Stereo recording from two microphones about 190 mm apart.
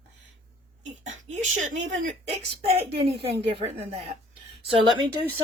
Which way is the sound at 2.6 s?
30° right (ahead or behind).